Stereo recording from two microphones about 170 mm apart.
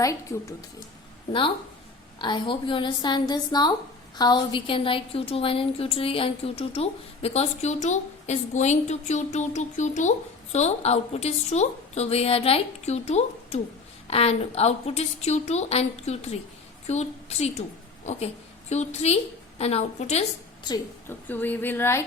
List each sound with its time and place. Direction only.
0.0 s a woman's voice: 20° left (ahead or behind)
2.1 s a woman's voice: 30° left (ahead or behind)
18.7 s a woman's voice: 40° left (ahead or behind)
20.7 s a woman's voice: 20° left (ahead or behind)
21.2 s speech: 10° left (ahead or behind)